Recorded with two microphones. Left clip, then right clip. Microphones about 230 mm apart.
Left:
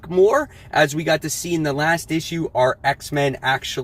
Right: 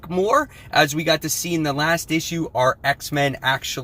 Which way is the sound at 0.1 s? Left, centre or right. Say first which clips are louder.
Left 3 dB; centre.